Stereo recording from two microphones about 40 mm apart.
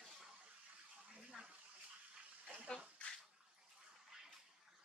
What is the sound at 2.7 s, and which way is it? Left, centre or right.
Bathtub, centre.